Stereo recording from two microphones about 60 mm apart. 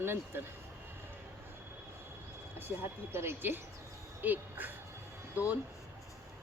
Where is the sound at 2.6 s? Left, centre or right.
Right.